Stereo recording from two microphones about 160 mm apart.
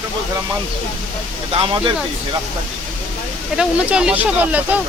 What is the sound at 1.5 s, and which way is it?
Speech, 35° right (ahead or behind).